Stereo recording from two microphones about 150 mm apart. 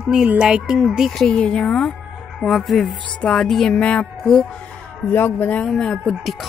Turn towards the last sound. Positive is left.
turn(degrees=5)  # may be behind; listen again after turning